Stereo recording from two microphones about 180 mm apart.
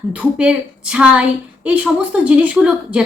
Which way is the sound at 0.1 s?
5° right (ahead or behind).